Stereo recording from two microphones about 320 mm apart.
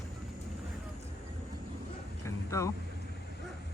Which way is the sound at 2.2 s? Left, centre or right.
Centre.